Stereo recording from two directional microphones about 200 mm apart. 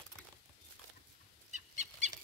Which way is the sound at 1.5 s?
35° right (ahead or behind).